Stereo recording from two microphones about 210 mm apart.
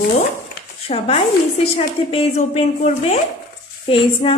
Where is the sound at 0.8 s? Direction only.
30° left (ahead or behind).